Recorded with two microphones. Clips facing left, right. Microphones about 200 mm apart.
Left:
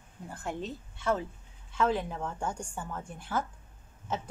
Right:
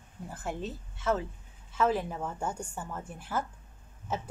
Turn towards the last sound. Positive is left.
turn(degrees=-10)  # may be behind; listen again after turning